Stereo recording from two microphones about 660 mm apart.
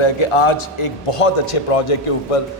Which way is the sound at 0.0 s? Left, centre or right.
Left.